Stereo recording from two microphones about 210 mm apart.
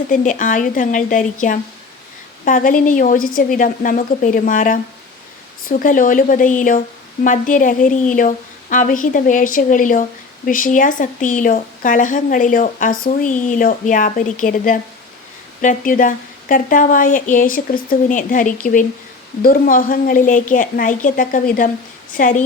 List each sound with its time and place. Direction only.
0.1 s a woman's voice: 35° left (ahead or behind)